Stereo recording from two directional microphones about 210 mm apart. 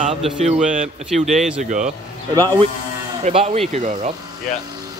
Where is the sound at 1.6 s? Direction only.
35° right (ahead or behind).